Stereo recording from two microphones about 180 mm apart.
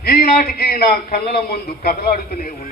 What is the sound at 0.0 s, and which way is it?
A man's voice, 60° left (ahead or behind).